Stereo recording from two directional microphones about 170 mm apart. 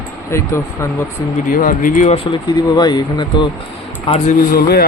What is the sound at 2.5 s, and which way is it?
Speech, 25° left (ahead or behind).